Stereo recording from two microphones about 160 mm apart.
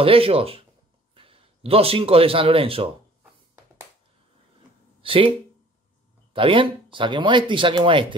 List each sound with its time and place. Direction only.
0.0 s a man's voice: 35° right (ahead or behind)
5.0 s speech: 35° right (ahead or behind)
6.3 s speech: 35° right (ahead or behind)